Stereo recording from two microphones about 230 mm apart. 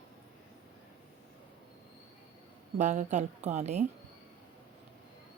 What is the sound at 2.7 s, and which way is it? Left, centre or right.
A woman's voice, right.